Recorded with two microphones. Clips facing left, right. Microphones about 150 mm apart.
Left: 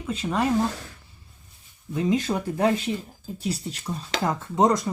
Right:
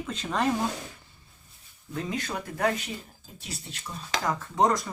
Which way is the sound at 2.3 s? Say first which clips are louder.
Left 5 dB; 25° left (ahead or behind).